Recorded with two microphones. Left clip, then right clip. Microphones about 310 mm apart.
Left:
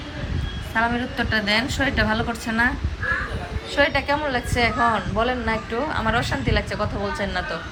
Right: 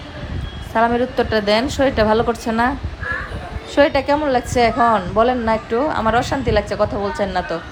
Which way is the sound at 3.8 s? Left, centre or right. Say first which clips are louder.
Right 5 dB; right.